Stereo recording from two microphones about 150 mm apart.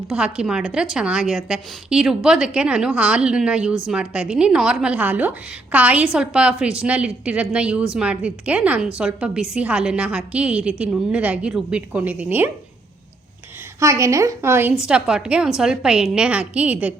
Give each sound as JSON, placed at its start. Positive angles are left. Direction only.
{"t": 0.1, "sound": "a woman's voice", "side_deg": -5}
{"t": 13.7, "sound": "a woman's voice", "side_deg": -20}
{"t": 14.8, "sound": "a woman's voice", "side_deg": -5}